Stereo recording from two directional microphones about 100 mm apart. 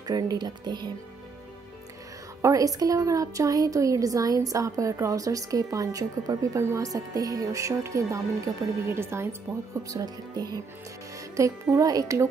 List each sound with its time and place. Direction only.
0.0 s speech: 40° right (ahead or behind)
2.4 s a woman's voice: 35° right (ahead or behind)
9.8 s a woman's voice: 35° right (ahead or behind)